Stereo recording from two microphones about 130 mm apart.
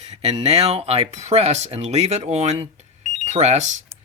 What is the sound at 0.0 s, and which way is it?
Speech, 55° right (ahead or behind).